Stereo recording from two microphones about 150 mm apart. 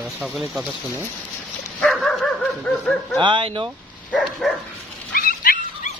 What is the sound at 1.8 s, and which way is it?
Dog, 5° left (ahead or behind).